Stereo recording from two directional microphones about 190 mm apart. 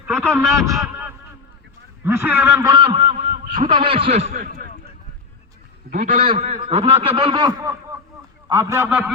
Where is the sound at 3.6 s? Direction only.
25° right (ahead or behind).